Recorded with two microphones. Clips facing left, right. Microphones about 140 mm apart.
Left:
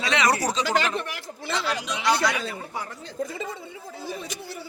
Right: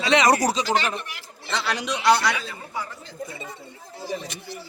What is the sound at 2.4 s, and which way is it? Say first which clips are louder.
Speech: left 1 dB; 55° left (ahead or behind).